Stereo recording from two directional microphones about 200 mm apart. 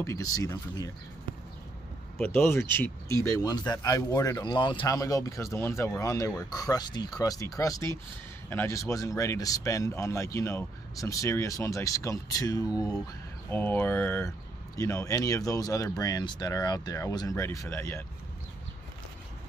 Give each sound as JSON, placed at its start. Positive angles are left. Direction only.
{"t": 0.0, "sound": "speech", "side_deg": 15}
{"t": 2.1, "sound": "speech", "side_deg": 10}